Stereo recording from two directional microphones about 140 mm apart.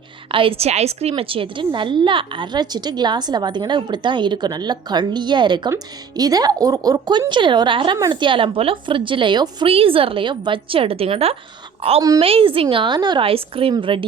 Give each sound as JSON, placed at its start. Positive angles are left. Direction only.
{"t": 0.3, "sound": "a woman's voice", "side_deg": -40}